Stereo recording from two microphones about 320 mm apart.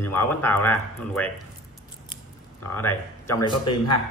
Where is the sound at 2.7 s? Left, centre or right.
Centre.